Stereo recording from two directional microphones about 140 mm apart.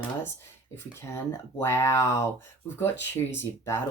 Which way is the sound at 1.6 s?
20° left (ahead or behind).